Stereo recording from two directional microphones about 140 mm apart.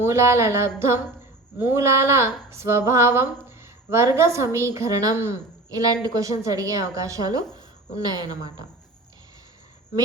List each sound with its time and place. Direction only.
0.0 s a woman's voice: 20° right (ahead or behind)